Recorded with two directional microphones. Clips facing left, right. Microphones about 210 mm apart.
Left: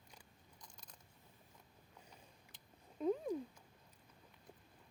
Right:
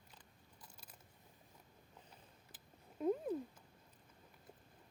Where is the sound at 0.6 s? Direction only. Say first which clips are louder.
Right 1 dB; 5° right (ahead or behind).